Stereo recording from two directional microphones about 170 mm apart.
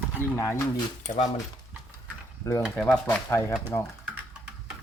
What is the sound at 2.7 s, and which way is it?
Speech, 5° left (ahead or behind).